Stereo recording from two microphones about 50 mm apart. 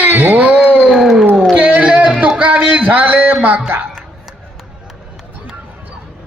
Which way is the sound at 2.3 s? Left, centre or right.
Right.